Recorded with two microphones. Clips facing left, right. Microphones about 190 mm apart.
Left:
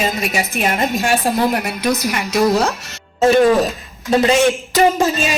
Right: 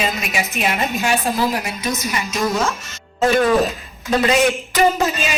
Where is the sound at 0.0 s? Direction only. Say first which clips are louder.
Left 3 dB; 40° left (ahead or behind); by 2.4 s 65° left (ahead or behind).